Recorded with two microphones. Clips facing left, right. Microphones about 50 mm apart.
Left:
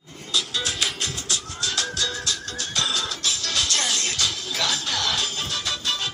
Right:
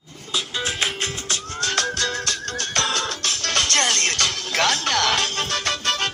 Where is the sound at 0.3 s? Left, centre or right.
Right.